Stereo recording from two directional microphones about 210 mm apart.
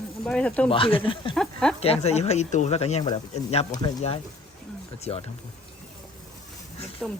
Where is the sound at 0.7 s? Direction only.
25° left (ahead or behind).